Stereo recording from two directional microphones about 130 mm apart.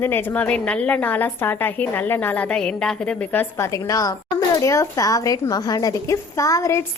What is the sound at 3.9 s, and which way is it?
A woman's voice, 25° left (ahead or behind).